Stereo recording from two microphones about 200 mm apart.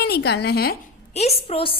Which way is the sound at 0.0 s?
55° left (ahead or behind).